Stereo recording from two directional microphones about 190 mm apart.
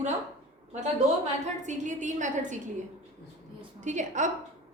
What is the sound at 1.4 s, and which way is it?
A woman's voice, 40° right (ahead or behind).